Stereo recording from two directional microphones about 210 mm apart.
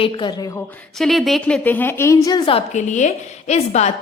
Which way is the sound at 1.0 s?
Centre (ahead or behind).